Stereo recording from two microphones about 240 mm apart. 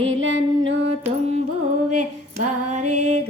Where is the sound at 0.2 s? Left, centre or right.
Right.